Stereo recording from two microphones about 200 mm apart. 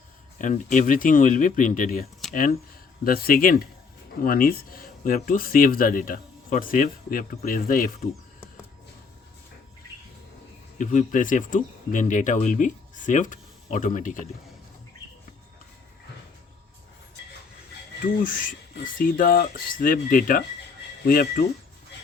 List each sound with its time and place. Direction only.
0.3 s speech: 40° left (ahead or behind)
10.8 s speech: 40° left (ahead or behind)
18.0 s speech: 45° left (ahead or behind)